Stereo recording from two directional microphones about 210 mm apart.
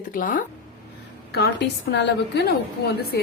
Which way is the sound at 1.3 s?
55° left (ahead or behind).